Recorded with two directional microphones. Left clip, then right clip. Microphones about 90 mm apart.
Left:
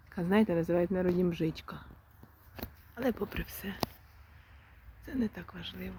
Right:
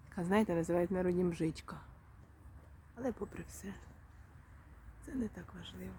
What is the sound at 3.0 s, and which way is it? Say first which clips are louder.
Speech: left 7 dB; 40° left (ahead or behind).